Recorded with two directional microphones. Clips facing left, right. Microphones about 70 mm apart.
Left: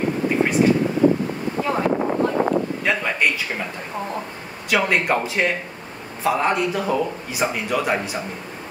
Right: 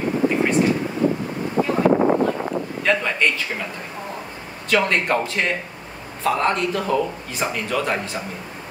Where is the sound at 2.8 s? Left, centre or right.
Centre.